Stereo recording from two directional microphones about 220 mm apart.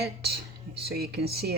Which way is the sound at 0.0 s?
45° right (ahead or behind).